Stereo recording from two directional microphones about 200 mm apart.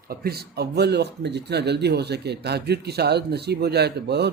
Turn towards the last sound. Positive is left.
turn(degrees=-55)  # may be behind; listen again after turning